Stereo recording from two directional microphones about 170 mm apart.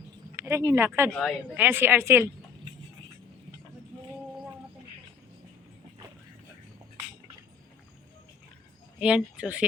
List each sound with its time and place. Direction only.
0.3 s speech: 15° right (ahead or behind)
9.0 s speech: 5° right (ahead or behind)